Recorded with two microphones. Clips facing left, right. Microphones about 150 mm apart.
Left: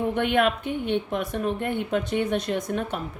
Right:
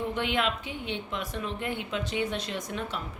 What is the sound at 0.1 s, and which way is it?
A woman's voice, 55° left (ahead or behind).